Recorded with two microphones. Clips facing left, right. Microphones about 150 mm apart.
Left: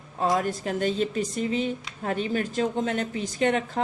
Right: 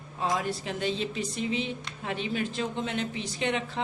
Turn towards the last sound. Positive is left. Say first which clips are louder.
# left 6 dB
turn(degrees=45)  # may be behind; listen again after turning